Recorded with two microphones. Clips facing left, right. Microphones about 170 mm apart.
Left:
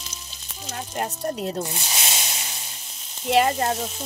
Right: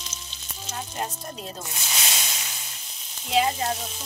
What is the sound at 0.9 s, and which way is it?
Speech, 70° left (ahead or behind).